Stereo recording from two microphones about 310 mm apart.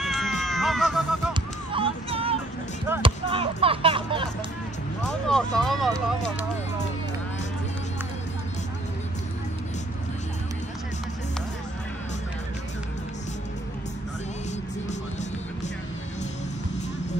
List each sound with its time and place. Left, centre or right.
0.0 s cat: centre
1.3 s music: centre
2.9 s a sound: centre
5.0 s speech: centre